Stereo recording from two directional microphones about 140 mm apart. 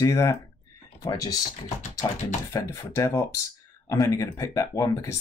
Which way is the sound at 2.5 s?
25° left (ahead or behind).